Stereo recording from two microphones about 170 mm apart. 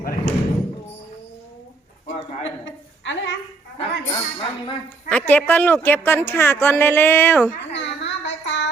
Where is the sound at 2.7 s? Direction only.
90° left.